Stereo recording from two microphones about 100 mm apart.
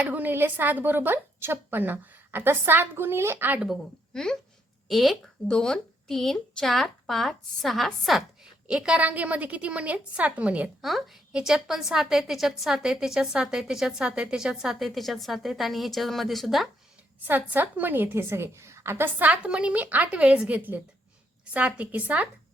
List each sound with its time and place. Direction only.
0.0 s a woman's voice: 15° right (ahead or behind)
4.1 s a woman's voice: 5° left (ahead or behind); by 10.8 s 15° right (ahead or behind)
10.8 s a woman's voice: centre (ahead or behind)
17.2 s a woman's voice: 20° right (ahead or behind)